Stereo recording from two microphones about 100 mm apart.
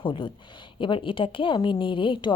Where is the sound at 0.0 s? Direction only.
55° left (ahead or behind).